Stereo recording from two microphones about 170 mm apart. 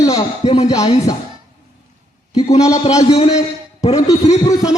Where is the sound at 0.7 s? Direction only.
20° left (ahead or behind).